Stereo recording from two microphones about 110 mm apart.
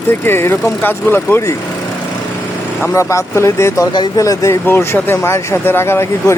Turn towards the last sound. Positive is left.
turn(degrees=25)  # may be behind; listen again after turning